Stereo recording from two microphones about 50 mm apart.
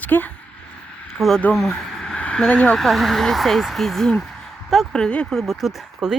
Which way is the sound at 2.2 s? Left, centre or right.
Left.